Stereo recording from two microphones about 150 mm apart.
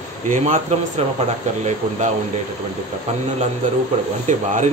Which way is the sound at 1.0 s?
45° right (ahead or behind).